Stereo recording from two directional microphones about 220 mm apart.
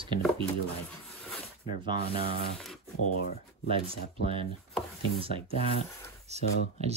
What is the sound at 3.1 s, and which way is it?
Speech, 45° left (ahead or behind).